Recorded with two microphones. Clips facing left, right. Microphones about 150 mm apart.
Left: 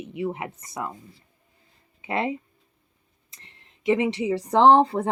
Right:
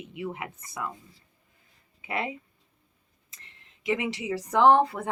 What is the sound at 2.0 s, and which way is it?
Speech, 30° left (ahead or behind).